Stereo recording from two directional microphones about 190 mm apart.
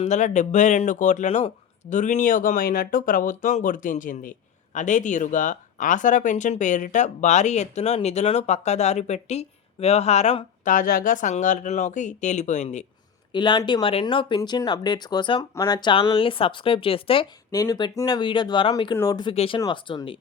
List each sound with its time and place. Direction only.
0.0 s speech: 40° left (ahead or behind)
13.3 s speech: 25° left (ahead or behind)